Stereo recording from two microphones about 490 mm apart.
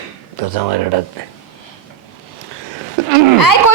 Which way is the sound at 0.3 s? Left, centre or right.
Right.